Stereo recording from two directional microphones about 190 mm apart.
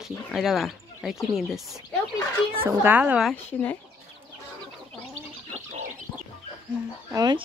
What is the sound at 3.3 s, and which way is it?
Speech, 10° left (ahead or behind).